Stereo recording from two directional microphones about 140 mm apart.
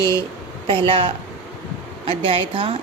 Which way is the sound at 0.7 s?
40° right (ahead or behind).